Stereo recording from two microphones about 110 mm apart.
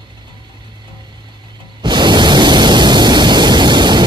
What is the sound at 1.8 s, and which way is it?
Pink noise, 45° right (ahead or behind).